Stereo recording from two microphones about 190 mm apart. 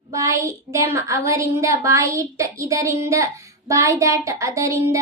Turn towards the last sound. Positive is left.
turn(degrees=-15)  # may be behind; listen again after turning